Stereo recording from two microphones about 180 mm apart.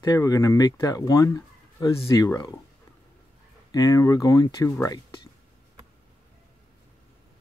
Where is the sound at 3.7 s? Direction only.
20° left (ahead or behind).